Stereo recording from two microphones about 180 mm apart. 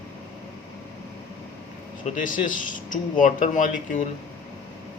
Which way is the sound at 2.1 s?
50° left (ahead or behind).